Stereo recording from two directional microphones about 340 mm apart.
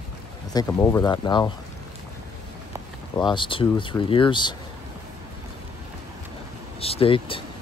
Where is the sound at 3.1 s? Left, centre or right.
Centre.